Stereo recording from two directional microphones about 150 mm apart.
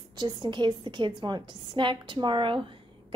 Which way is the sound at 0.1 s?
25° right (ahead or behind).